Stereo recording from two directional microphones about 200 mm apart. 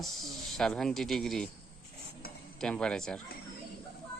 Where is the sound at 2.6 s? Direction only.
5° left (ahead or behind).